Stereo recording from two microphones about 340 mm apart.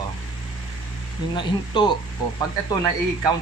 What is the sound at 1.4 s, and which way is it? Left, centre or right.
Speech, centre.